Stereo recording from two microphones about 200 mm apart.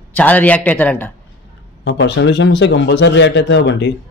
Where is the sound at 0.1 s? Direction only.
10° left (ahead or behind).